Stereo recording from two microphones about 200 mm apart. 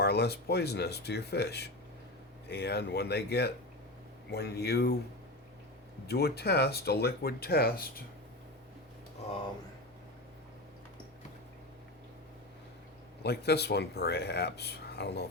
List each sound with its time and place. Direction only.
0.0 s speech: 55° left (ahead or behind)
6.1 s speech: 50° left (ahead or behind)
13.2 s speech: 55° left (ahead or behind)